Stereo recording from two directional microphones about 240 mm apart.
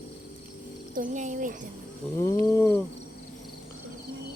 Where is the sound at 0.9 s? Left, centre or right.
Right.